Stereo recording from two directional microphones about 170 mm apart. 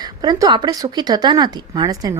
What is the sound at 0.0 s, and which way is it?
Speech, 25° right (ahead or behind).